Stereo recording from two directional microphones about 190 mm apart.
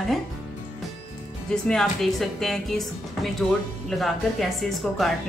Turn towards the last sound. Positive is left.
turn(degrees=0)  # may be behind; listen again after turning